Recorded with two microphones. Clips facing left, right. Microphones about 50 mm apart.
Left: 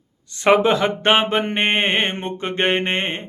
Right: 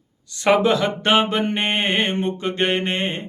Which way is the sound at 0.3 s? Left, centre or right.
Left.